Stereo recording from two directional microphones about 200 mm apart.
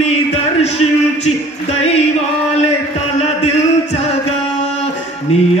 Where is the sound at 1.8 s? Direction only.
30° left (ahead or behind).